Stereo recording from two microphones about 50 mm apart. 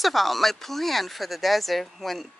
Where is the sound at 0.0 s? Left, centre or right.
Centre.